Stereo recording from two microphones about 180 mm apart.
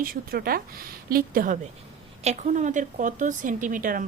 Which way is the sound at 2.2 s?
40° right (ahead or behind).